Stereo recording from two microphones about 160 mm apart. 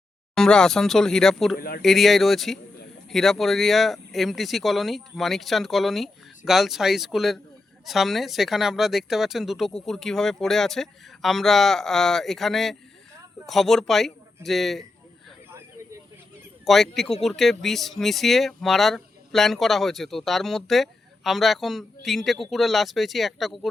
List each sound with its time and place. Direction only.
0.3 s speech: 5° left (ahead or behind)
1.5 s speech: 70° left (ahead or behind)
1.8 s speech: centre (ahead or behind)
16.6 s speech: centre (ahead or behind)